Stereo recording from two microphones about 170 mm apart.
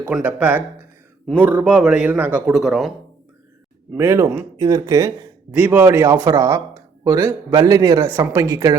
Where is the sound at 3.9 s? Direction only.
15° right (ahead or behind).